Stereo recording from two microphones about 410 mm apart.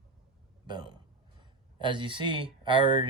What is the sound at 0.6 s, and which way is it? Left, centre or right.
Speech, centre.